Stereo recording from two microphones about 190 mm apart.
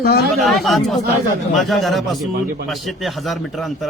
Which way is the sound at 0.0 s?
55° left (ahead or behind).